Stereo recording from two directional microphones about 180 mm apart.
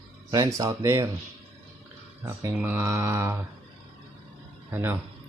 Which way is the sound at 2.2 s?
20° right (ahead or behind).